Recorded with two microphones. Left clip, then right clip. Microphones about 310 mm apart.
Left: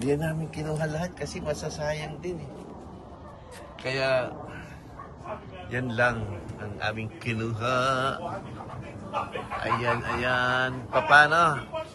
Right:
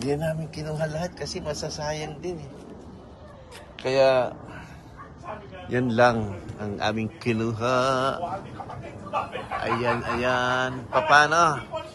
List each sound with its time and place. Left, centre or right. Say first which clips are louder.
0.0 s speech: right 1 dB; centre
3.8 s speech: right 6 dB; centre
5.7 s speech: right 5 dB; centre
9.1 s a sound: right 3 dB; right
9.9 s speech: right 2 dB; centre